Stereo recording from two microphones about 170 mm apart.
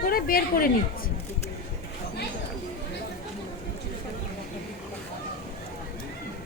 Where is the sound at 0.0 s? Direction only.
60° left (ahead or behind).